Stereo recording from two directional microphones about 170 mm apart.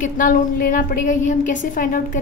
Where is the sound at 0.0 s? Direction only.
50° left (ahead or behind).